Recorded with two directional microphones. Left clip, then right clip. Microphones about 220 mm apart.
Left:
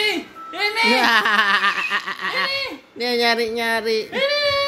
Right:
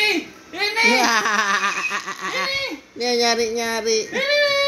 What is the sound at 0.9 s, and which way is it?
Speech, 10° left (ahead or behind).